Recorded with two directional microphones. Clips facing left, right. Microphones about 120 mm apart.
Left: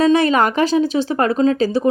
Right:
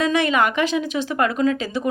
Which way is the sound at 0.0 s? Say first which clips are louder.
Left 5 dB; 35° left (ahead or behind).